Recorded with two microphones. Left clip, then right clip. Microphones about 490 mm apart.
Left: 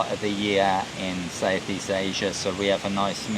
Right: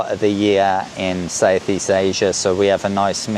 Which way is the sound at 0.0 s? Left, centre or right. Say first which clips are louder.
Right 9 dB; right.